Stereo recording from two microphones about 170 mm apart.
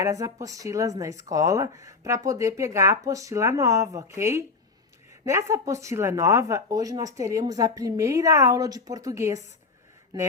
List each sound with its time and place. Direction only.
0.0 s speech: 20° right (ahead or behind)